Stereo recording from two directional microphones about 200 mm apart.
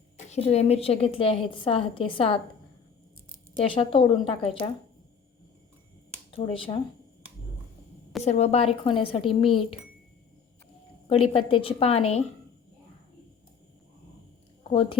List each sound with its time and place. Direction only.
0.3 s a woman's voice: 30° left (ahead or behind)
3.6 s a woman's voice: 25° left (ahead or behind)
6.3 s a woman's voice: 25° left (ahead or behind)
8.2 s a woman's voice: 35° left (ahead or behind)
11.1 s a woman's voice: 30° left (ahead or behind)
14.7 s a woman's voice: 25° left (ahead or behind)